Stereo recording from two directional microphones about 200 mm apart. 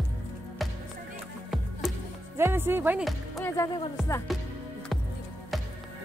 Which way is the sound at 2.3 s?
10° right (ahead or behind).